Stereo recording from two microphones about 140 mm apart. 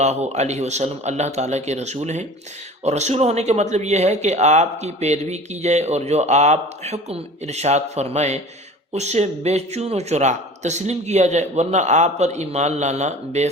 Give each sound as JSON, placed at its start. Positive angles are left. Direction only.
{"t": 0.0, "sound": "speech", "side_deg": -55}